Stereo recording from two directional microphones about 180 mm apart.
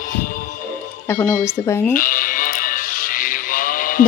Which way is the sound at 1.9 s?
50° left (ahead or behind).